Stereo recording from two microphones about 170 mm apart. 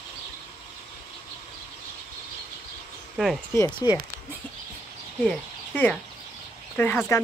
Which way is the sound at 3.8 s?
25° left (ahead or behind).